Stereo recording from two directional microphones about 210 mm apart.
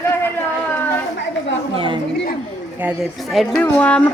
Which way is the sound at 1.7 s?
25° right (ahead or behind).